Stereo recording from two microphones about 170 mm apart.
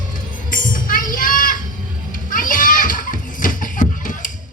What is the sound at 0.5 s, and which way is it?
Children playing, 55° left (ahead or behind).